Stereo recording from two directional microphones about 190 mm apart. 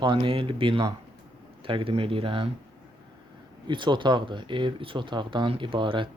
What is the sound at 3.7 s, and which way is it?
Speech, 25° right (ahead or behind).